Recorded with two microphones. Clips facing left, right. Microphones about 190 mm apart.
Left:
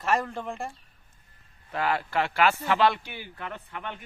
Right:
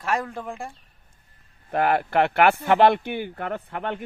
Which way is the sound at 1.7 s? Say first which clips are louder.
Right 6 dB; 55° right (ahead or behind).